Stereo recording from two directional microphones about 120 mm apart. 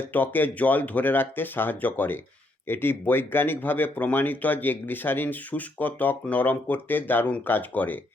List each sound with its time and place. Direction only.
0.1 s speech: 15° left (ahead or behind)